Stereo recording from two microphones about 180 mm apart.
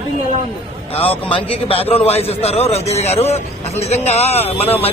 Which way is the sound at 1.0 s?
30° left (ahead or behind).